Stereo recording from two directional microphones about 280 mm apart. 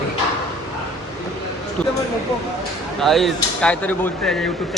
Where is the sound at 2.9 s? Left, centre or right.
Centre.